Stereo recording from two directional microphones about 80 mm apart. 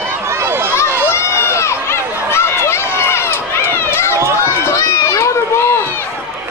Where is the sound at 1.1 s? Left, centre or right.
Left.